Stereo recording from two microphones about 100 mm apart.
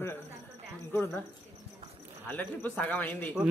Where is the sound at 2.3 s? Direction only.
15° left (ahead or behind).